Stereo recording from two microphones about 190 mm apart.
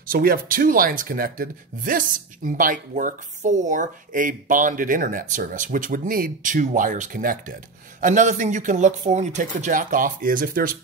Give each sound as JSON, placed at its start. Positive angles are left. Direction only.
{"t": 0.0, "sound": "a man's voice", "side_deg": -50}